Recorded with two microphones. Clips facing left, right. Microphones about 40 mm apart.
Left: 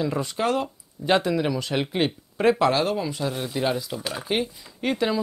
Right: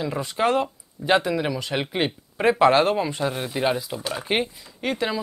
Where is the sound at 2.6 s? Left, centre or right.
Right.